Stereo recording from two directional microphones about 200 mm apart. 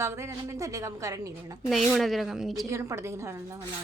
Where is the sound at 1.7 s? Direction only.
Centre (ahead or behind).